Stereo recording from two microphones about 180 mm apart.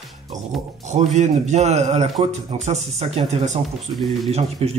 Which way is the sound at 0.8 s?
40° right (ahead or behind).